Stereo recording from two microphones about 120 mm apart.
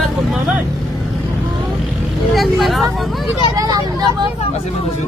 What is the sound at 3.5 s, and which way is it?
Speech, 30° right (ahead or behind).